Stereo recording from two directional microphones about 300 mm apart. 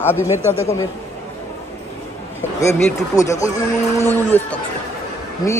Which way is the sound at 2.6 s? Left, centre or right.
Centre.